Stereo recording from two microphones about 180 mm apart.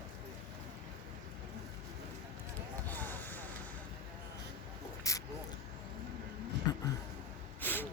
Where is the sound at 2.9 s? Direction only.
10° left (ahead or behind).